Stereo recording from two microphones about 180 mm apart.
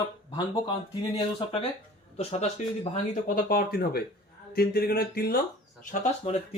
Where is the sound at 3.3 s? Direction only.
50° left (ahead or behind).